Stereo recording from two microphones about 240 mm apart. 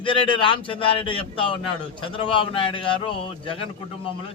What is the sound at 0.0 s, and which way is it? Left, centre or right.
Speech, left.